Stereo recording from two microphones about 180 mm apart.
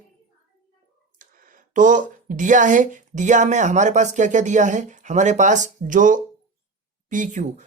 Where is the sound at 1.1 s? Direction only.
45° right (ahead or behind).